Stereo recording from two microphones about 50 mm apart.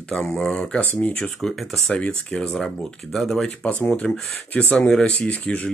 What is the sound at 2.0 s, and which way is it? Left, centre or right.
Speech, centre.